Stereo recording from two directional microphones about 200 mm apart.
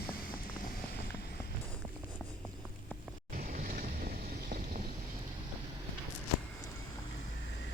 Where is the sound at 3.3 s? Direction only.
45° right (ahead or behind).